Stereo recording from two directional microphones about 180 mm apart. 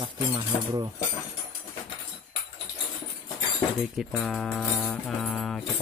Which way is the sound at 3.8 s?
Centre (ahead or behind).